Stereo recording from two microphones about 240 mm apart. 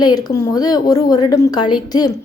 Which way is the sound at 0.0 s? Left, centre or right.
Centre.